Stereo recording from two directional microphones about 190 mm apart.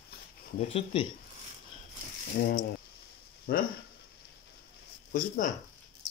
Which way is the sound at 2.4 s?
55° left (ahead or behind).